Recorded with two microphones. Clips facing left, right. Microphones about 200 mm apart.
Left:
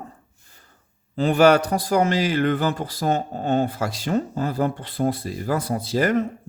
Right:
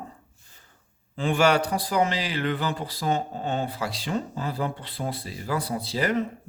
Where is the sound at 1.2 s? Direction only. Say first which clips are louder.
Left 6 dB; 40° left (ahead or behind).